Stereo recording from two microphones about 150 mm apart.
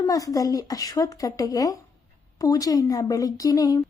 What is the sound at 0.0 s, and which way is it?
A woman's voice, 25° left (ahead or behind).